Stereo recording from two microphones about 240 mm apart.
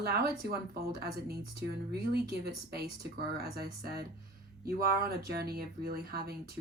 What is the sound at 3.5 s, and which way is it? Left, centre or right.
Speech, right.